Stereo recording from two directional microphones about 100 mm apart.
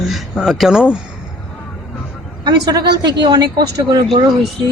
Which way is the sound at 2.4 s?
45° right (ahead or behind).